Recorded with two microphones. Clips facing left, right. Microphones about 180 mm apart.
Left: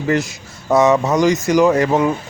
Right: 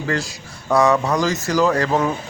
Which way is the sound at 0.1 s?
20° left (ahead or behind).